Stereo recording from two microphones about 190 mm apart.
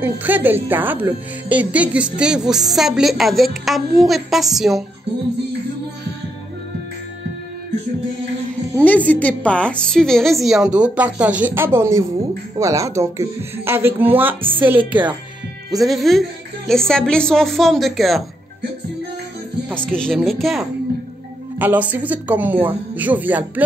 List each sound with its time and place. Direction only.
0.0 s a woman's voice: 10° right (ahead or behind)
8.8 s a woman's voice: 10° left (ahead or behind); by 14.3 s 10° right (ahead or behind)
14.4 s a woman's voice: 25° right (ahead or behind)
14.7 s a woman's voice: 10° right (ahead or behind)
19.9 s a woman's voice: 5° left (ahead or behind)